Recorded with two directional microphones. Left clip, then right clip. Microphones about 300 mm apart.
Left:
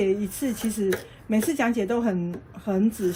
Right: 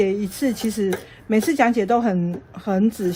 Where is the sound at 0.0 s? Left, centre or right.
Right.